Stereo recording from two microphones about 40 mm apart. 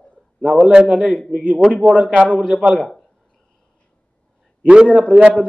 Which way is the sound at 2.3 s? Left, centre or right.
Left.